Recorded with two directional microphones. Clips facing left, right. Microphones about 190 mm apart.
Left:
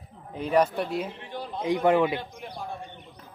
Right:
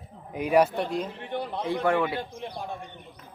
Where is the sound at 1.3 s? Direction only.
60° right (ahead or behind).